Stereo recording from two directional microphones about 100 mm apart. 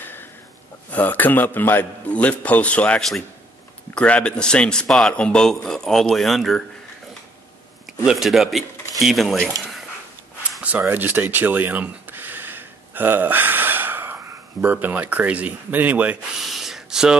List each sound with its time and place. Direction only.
0.9 s a man's voice: 15° left (ahead or behind); by 6.6 s centre (ahead or behind)
8.0 s a man's voice: 5° right (ahead or behind)
10.6 s speech: 15° right (ahead or behind)
16.3 s a sound: 5° right (ahead or behind)